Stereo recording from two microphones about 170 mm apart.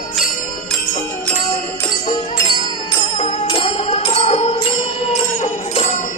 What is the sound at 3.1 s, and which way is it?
Music, 35° left (ahead or behind).